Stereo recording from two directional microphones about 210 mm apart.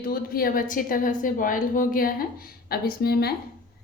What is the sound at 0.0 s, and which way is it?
A woman's voice, 45° left (ahead or behind).